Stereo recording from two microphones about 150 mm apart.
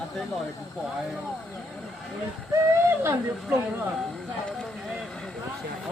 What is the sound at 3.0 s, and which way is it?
Speech, 15° right (ahead or behind).